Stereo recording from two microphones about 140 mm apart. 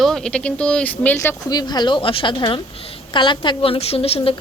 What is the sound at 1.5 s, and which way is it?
A woman's voice, 30° left (ahead or behind).